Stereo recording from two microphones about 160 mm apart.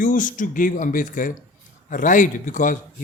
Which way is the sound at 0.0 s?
55° left (ahead or behind).